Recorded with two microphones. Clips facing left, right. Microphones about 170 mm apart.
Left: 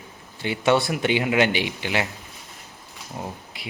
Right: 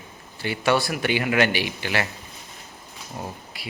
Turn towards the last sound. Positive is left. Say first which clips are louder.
# left 1 dB
turn(degrees=15)  # may be behind; listen again after turning